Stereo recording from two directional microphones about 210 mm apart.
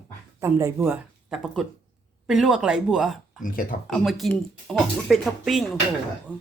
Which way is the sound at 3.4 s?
40° left (ahead or behind).